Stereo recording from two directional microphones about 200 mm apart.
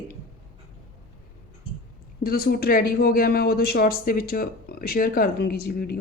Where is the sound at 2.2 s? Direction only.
50° left (ahead or behind).